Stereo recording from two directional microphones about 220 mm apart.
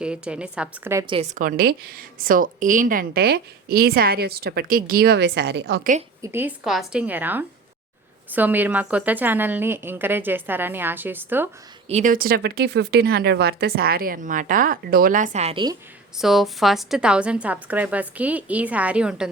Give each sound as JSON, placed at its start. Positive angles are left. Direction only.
{"t": 0.0, "sound": "a woman's voice", "side_deg": -5}
{"t": 1.0, "sound": "a woman's voice", "side_deg": -25}
{"t": 1.4, "sound": "a woman's voice", "side_deg": -40}
{"t": 6.2, "sound": "a woman's voice", "side_deg": -10}
{"t": 11.9, "sound": "speech", "side_deg": -35}
{"t": 16.1, "sound": "a woman's voice", "side_deg": 0}